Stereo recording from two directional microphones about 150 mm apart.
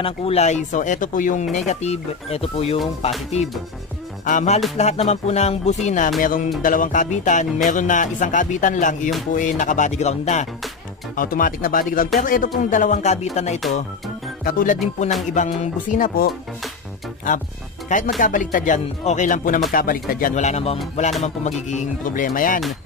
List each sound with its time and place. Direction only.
0.0 s speech: 40° left (ahead or behind); by 1.6 s 60° left (ahead or behind)
1.7 s speech: 45° left (ahead or behind)
4.3 s speech: 55° left (ahead or behind)
4.7 s speech: 45° left (ahead or behind)
11.1 s speech: 70° left (ahead or behind); by 13.6 s 45° left (ahead or behind)
14.4 s speech: 70° left (ahead or behind)
15.3 s speech: 55° left (ahead or behind)
17.8 s speech: 60° left (ahead or behind)